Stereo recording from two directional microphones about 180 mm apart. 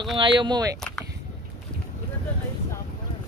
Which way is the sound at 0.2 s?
25° right (ahead or behind).